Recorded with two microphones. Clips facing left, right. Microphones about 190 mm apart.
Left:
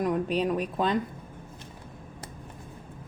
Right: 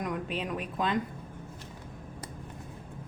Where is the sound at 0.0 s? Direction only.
35° left (ahead or behind).